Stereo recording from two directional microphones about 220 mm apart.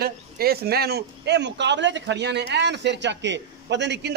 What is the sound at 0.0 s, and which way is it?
Speech, 45° right (ahead or behind).